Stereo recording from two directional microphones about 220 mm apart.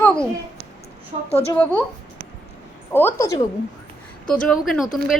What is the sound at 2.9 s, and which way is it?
Speech, 10° left (ahead or behind).